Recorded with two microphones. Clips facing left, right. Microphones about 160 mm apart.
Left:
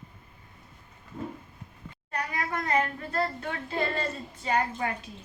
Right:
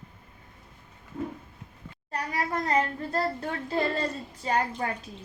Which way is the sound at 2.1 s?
35° right (ahead or behind).